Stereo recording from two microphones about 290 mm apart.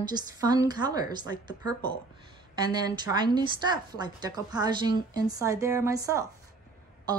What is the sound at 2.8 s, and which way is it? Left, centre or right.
A woman's voice, centre.